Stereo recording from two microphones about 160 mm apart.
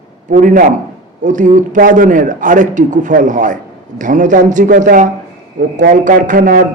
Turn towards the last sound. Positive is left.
turn(degrees=-55)  # may be behind; listen again after turning